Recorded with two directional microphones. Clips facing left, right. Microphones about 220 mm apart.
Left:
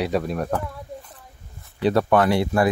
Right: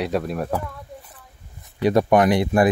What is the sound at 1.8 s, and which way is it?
Speech, 15° right (ahead or behind).